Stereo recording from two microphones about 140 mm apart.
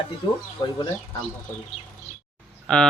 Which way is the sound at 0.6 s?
35° left (ahead or behind).